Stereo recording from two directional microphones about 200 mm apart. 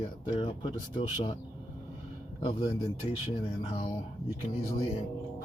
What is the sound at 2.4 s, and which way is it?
Speech, 25° left (ahead or behind).